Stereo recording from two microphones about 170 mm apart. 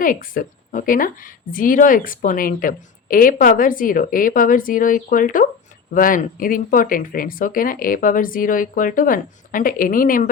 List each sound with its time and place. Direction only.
0.0 s a woman's voice: 55° left (ahead or behind)